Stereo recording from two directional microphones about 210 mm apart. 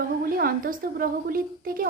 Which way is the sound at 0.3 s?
45° right (ahead or behind).